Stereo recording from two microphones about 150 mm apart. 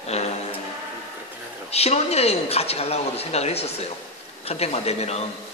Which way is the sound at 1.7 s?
45° left (ahead or behind).